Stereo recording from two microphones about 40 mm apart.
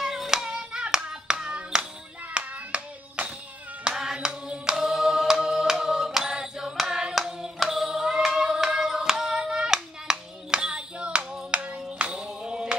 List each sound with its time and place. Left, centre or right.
0.0 s hands: centre
0.4 s hands: centre
2.3 s clapping: right
3.8 s hands: centre
7.5 s choir: centre
7.9 s child singing: centre
8.4 s hands: centre